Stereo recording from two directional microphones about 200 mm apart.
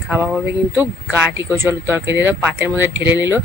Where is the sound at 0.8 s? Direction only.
10° right (ahead or behind).